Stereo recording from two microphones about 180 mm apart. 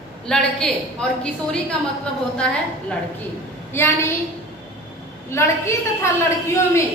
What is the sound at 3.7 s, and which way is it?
Speech, 15° left (ahead or behind).